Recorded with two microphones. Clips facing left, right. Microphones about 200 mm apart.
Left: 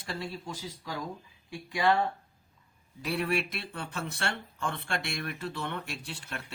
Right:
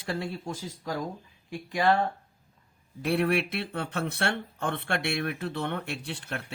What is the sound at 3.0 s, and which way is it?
Speech, 60° right (ahead or behind).